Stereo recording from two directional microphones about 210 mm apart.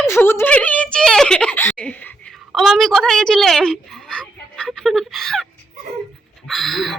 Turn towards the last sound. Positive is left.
turn(degrees=0)  # may be behind; listen again after turning